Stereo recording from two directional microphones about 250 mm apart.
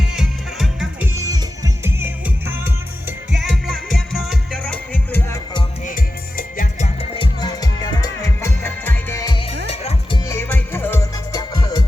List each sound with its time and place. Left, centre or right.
0.0 s music: centre
5.8 s music: left
10.2 s music: centre